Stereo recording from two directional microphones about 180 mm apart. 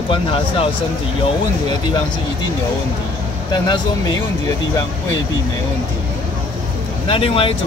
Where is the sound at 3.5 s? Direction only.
25° left (ahead or behind).